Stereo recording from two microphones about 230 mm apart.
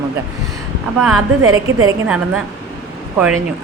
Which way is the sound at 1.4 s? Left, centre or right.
Right.